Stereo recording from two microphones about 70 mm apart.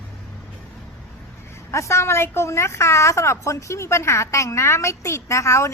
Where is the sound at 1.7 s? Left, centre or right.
Left.